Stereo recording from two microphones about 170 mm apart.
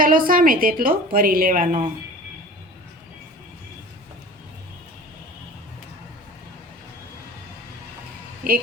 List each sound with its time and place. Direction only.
0.0 s a woman's voice: 55° right (ahead or behind)